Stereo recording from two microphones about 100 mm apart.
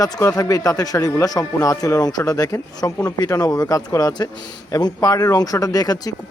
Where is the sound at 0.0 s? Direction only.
35° left (ahead or behind).